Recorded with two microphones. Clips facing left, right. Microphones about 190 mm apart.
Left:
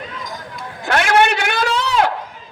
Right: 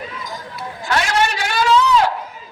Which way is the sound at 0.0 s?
5° right (ahead or behind).